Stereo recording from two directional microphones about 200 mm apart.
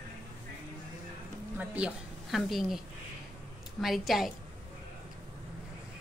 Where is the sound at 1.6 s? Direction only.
5° right (ahead or behind).